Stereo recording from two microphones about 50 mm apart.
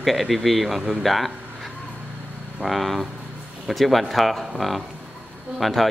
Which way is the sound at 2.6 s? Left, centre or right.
Centre.